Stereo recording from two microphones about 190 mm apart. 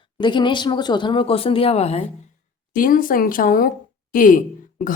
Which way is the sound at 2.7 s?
45° left (ahead or behind).